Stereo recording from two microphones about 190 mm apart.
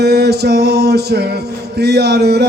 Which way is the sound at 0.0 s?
60° right (ahead or behind).